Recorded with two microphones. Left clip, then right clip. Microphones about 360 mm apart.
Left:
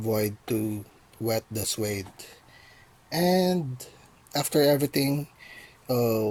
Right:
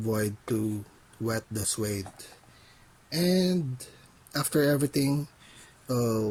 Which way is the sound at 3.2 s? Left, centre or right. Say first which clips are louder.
Left 4 dB; left.